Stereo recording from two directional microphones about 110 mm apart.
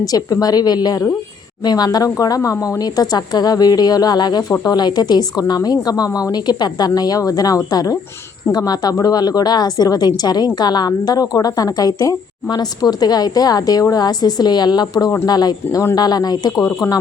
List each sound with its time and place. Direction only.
0.0 s a woman's voice: 35° left (ahead or behind)